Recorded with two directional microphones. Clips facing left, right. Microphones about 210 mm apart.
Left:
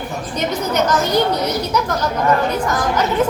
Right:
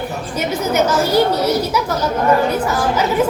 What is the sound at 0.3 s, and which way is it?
A woman's voice, 5° right (ahead or behind).